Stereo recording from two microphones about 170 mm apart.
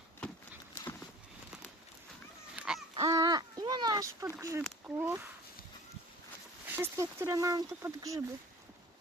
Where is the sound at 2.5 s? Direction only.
5° right (ahead or behind).